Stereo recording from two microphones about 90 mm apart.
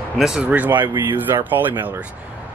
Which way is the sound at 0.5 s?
20° right (ahead or behind).